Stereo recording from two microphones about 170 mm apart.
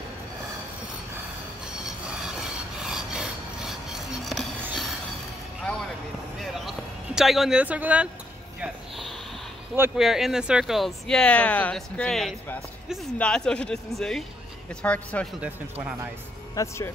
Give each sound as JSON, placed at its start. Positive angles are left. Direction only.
{"t": 2.8, "sound": "rub", "side_deg": -5}
{"t": 5.6, "sound": "a sound", "side_deg": 5}
{"t": 7.2, "sound": "speech", "side_deg": 0}
{"t": 8.5, "sound": "a sound", "side_deg": -5}
{"t": 9.9, "sound": "a man's voice", "side_deg": 0}
{"t": 16.5, "sound": "a man's voice", "side_deg": 15}